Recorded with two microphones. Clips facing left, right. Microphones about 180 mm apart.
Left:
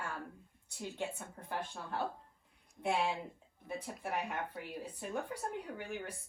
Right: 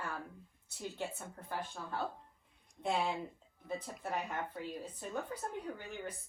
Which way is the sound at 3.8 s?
15° left (ahead or behind).